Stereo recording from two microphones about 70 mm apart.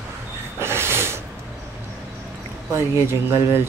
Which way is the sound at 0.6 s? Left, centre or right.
Right.